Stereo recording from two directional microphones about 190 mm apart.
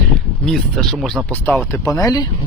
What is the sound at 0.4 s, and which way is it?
Speech, 5° left (ahead or behind).